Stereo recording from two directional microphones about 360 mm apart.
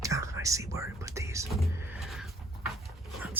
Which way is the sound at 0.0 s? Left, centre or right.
Centre.